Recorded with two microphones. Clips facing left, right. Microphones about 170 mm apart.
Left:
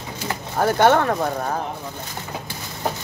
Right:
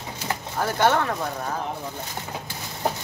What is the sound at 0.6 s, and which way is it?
Speech, 55° left (ahead or behind).